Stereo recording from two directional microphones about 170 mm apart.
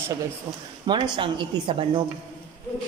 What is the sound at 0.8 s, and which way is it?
Speech, 25° right (ahead or behind).